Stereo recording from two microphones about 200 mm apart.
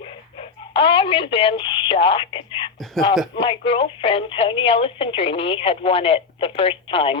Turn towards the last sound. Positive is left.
turn(degrees=25)  # may be behind; listen again after turning